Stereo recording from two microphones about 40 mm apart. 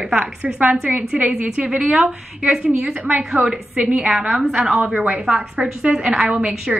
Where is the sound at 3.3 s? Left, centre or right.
Right.